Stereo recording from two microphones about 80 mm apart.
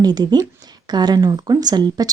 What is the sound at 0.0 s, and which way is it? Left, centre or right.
Speech, right.